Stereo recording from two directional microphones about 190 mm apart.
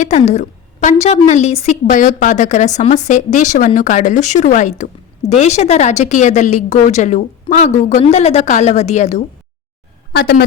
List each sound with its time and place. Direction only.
0.0 s a woman's voice: 35° left (ahead or behind)
10.1 s a woman's voice: 60° left (ahead or behind)